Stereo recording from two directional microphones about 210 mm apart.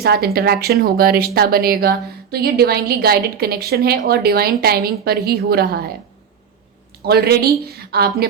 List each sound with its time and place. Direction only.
0.0 s speech: 50° right (ahead or behind)
7.0 s speech: 50° right (ahead or behind)